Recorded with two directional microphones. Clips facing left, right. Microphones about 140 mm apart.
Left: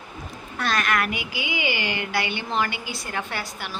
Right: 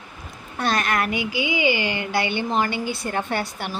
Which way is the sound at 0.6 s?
30° right (ahead or behind).